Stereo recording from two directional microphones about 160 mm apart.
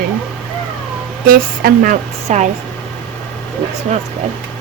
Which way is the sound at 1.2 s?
65° right (ahead or behind).